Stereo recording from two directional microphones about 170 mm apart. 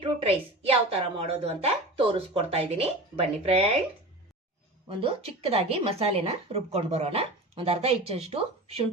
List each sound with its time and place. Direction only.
0.0 s a woman's voice: 35° right (ahead or behind)
4.9 s a woman's voice: 30° right (ahead or behind)